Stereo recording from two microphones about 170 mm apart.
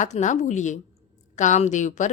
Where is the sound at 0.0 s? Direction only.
45° left (ahead or behind).